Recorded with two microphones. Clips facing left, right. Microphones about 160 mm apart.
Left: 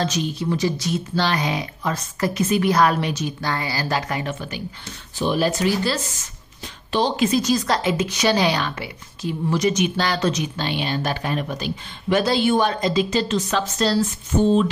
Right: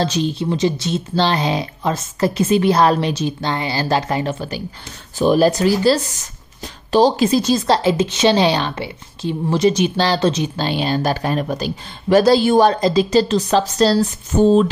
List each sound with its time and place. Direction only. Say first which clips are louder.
0.0 s a woman's voice: right 4 dB; 30° right (ahead or behind)